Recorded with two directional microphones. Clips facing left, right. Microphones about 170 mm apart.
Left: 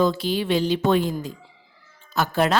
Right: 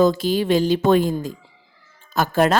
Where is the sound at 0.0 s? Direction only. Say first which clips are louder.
Right 4 dB; 45° right (ahead or behind).